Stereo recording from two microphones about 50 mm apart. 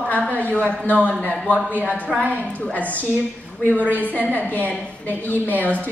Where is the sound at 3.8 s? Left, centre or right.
Left.